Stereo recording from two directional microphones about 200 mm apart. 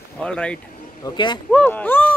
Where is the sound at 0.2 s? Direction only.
5° left (ahead or behind).